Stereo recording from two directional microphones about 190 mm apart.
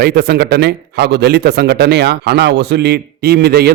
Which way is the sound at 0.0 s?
55° right (ahead or behind).